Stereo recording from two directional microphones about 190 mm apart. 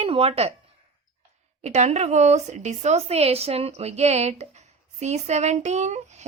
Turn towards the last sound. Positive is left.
turn(degrees=-35)  # may be behind; listen again after turning